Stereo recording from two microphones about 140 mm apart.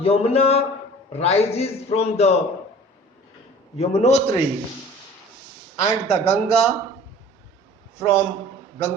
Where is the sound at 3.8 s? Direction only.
50° left (ahead or behind).